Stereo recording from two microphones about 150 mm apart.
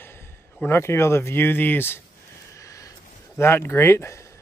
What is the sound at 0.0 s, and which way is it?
Speech, 15° left (ahead or behind).